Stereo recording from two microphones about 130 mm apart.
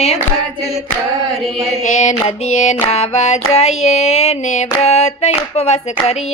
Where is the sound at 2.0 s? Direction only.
65° left (ahead or behind).